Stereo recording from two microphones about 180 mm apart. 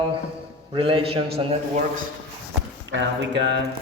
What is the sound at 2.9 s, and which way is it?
Speech, 85° right.